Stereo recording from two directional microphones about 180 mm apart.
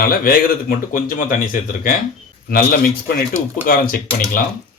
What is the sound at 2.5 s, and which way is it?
A man's voice, 55° left (ahead or behind).